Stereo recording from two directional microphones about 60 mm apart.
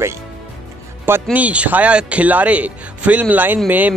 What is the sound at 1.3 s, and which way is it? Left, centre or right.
Speech, right.